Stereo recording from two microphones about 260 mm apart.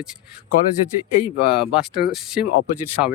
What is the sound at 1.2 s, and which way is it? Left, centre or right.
Speech, left.